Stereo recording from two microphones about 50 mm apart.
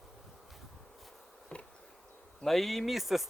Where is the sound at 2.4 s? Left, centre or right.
Centre.